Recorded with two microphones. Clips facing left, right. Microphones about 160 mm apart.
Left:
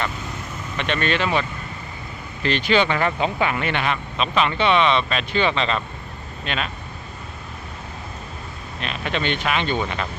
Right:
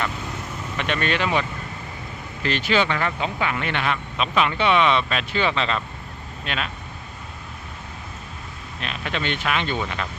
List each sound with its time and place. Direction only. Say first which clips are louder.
0.8 s speech: left 1 dB; 10° right (ahead or behind)
3.0 s speech: left 4 dB; 20° left (ahead or behind)
3.6 s speech: left 2 dB; 5° left (ahead or behind)
4.2 s speech: left 1 dB; 5° right (ahead or behind)
8.8 s speech: left 3 dB; centre (ahead or behind)